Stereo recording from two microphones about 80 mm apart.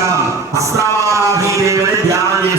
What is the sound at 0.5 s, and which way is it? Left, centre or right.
Music, right.